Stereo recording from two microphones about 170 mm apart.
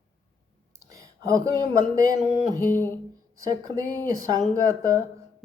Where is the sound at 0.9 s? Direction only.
20° right (ahead or behind).